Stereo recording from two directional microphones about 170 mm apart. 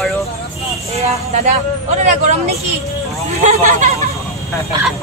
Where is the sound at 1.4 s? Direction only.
45° right (ahead or behind).